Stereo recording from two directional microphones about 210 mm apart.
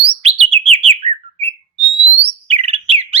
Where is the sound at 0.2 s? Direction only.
30° right (ahead or behind).